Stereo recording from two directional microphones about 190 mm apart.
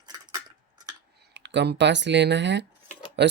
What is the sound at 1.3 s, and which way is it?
Speech, 70° right (ahead or behind).